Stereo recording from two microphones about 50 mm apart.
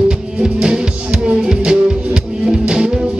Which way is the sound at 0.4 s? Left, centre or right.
Centre.